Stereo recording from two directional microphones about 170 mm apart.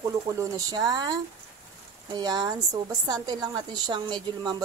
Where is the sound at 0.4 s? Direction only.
20° right (ahead or behind).